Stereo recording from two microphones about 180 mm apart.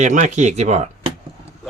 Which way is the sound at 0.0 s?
40° right (ahead or behind).